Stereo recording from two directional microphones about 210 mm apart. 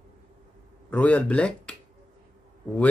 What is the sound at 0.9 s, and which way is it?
Speech, 5° left (ahead or behind).